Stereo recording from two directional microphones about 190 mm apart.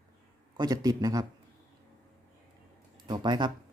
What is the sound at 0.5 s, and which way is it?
Speech, 20° right (ahead or behind).